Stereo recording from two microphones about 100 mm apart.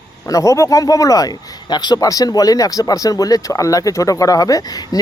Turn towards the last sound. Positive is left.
turn(degrees=40)  # may be behind; listen again after turning